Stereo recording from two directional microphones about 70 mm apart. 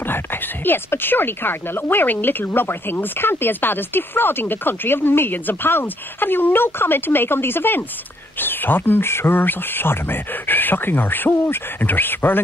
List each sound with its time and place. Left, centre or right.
0.0 s speech: left